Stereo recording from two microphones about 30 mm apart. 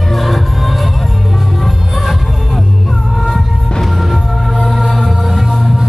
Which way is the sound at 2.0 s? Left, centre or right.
Centre.